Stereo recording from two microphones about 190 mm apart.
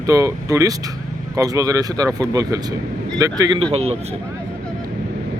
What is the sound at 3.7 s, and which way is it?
Speech, 35° right (ahead or behind).